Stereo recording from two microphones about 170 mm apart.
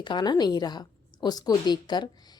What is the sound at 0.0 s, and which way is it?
A woman's voice, 25° left (ahead or behind).